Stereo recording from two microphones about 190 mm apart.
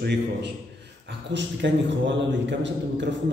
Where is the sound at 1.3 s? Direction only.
70° right (ahead or behind).